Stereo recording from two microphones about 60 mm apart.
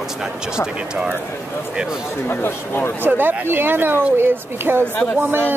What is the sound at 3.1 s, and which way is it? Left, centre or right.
Speech, right.